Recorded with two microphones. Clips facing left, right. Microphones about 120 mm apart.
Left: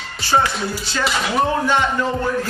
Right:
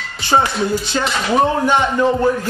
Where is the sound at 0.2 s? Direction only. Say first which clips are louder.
Right 2 dB; 20° right (ahead or behind).